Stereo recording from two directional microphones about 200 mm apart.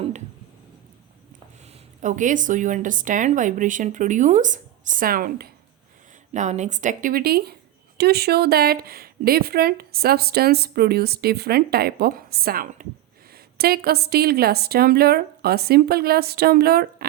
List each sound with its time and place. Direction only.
2.0 s a woman's voice: 40° right (ahead or behind)